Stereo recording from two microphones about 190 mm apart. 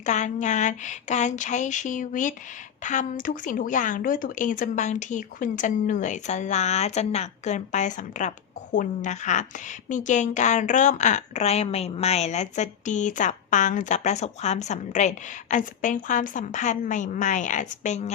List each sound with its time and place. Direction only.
0.0 s a woman's voice: 40° left (ahead or behind)